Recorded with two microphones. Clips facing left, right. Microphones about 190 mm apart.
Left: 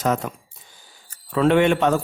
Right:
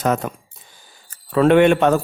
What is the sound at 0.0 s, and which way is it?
A man's voice, 55° right (ahead or behind).